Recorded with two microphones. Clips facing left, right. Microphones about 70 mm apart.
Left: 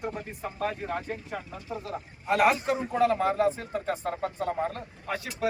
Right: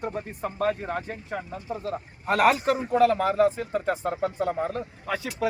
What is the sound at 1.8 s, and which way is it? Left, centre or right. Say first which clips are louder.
Speech: right 5 dB; right.